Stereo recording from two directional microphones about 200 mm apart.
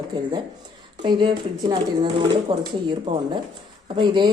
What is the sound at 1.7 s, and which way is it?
Speech, 25° right (ahead or behind).